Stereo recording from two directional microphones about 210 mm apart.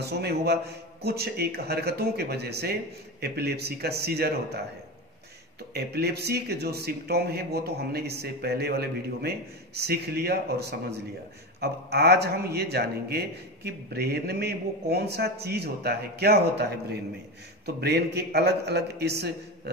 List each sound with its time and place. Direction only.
0.0 s speech: 50° right (ahead or behind)
5.7 s speech: 50° right (ahead or behind)